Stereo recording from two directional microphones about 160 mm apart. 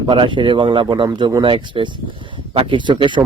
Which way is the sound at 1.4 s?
35° right (ahead or behind).